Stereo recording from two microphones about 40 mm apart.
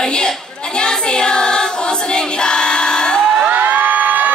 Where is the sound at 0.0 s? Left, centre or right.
Left.